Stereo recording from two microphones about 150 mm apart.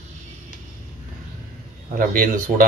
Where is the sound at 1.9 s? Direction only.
70° right (ahead or behind).